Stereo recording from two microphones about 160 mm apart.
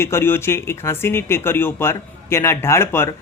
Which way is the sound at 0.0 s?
15° left (ahead or behind).